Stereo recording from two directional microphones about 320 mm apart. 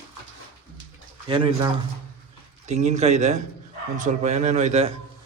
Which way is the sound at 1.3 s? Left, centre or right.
Centre.